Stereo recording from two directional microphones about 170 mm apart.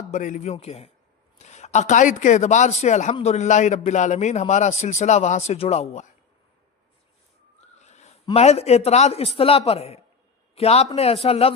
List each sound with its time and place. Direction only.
0.1 s a man's voice: 45° left (ahead or behind)
7.8 s a man's voice: 40° left (ahead or behind)